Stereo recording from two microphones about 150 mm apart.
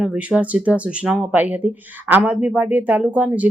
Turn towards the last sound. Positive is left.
turn(degrees=-10)  # may be behind; listen again after turning